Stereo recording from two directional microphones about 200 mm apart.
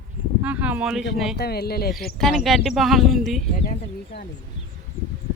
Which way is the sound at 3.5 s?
45° left (ahead or behind).